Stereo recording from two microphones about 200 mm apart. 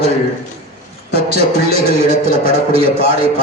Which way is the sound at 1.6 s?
30° right (ahead or behind).